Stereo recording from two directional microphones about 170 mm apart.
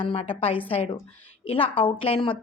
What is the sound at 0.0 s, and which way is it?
A woman's voice, 30° left (ahead or behind).